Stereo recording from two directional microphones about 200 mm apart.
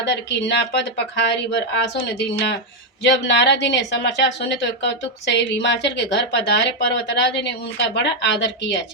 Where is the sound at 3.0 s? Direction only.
60° left (ahead or behind).